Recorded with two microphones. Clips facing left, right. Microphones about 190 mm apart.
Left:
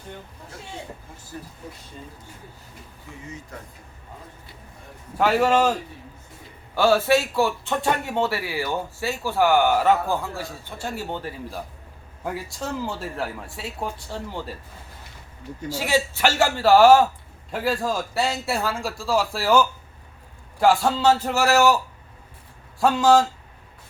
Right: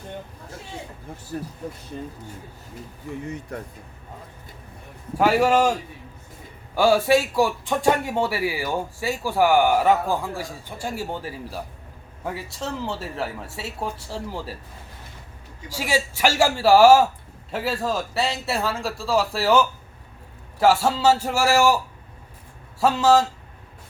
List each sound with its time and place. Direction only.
3.2 s speech: 60° right (ahead or behind)
5.1 s speech: 10° right (ahead or behind)
6.7 s speech: 10° right (ahead or behind)
15.7 s speech: 10° right (ahead or behind)
22.8 s speech: 5° right (ahead or behind)